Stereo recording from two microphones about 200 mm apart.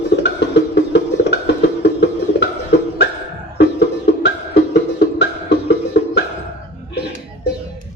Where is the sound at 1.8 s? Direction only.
60° left (ahead or behind).